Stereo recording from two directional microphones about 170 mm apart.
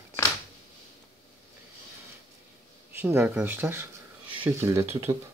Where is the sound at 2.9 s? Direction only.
10° right (ahead or behind).